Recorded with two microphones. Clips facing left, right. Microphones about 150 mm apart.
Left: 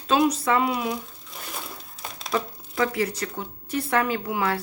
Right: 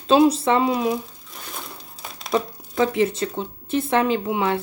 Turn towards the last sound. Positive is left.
turn(degrees=-20)  # may be behind; listen again after turning